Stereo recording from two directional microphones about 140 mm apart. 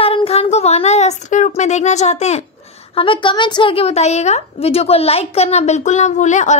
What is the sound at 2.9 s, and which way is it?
A woman's voice, 40° left (ahead or behind).